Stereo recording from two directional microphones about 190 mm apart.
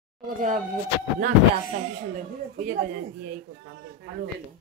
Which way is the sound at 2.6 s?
45° right (ahead or behind).